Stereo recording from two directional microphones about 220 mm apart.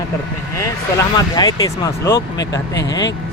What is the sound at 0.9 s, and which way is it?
Speech, 15° left (ahead or behind).